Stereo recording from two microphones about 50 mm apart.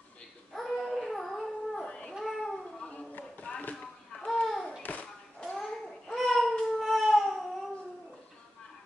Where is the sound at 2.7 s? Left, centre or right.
Centre.